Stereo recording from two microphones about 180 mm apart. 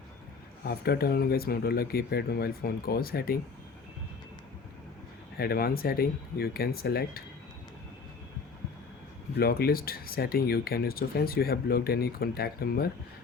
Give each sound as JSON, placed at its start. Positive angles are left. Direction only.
{"t": 0.6, "sound": "speech", "side_deg": 60}
{"t": 5.4, "sound": "speech", "side_deg": 60}
{"t": 9.4, "sound": "speech", "side_deg": 60}